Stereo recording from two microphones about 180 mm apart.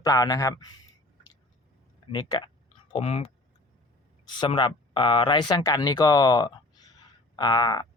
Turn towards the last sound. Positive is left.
turn(degrees=25)  # may be behind; listen again after turning